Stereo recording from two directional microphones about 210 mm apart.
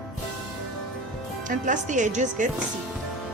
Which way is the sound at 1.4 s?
40° right (ahead or behind).